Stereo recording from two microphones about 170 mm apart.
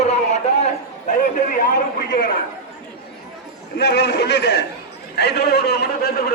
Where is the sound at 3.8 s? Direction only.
75° left (ahead or behind).